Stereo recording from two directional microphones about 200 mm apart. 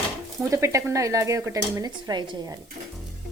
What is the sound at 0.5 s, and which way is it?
Speech, 15° right (ahead or behind).